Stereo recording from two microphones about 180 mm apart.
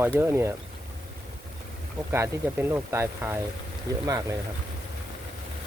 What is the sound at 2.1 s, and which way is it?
Speech, 15° right (ahead or behind).